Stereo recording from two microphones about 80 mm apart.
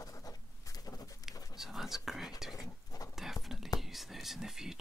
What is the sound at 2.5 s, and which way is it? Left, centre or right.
Livestock, left.